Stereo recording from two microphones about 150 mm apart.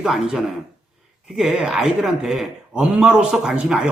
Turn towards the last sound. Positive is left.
turn(degrees=-5)  # may be behind; listen again after turning